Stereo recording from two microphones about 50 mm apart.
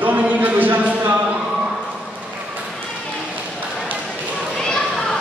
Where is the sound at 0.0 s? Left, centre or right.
Right.